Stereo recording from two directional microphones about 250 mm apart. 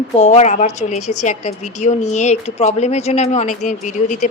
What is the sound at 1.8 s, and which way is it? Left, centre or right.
Speech, left.